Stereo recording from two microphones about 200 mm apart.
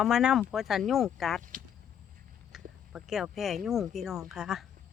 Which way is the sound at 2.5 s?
Centre (ahead or behind).